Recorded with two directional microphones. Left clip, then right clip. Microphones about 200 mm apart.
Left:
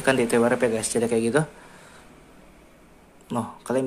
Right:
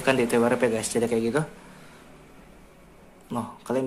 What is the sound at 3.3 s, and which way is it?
Speech, 10° left (ahead or behind).